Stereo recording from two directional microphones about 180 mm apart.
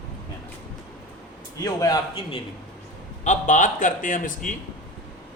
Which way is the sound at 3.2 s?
40° left (ahead or behind).